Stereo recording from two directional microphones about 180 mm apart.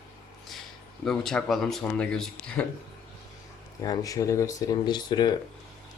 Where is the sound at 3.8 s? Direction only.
20° left (ahead or behind).